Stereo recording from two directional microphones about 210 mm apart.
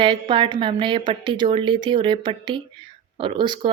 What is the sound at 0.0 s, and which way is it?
A woman's voice, 25° right (ahead or behind).